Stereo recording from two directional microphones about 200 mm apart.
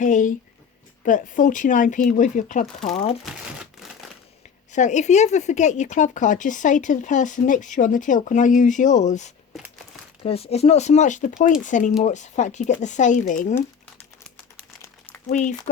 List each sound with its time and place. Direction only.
0.0 s speech: 40° left (ahead or behind)
4.7 s speech: 35° left (ahead or behind)
14.3 s crumpling: 10° left (ahead or behind)
15.3 s speech: 40° left (ahead or behind)